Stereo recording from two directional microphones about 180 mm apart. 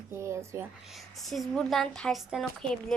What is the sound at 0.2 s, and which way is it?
Speech, 15° right (ahead or behind).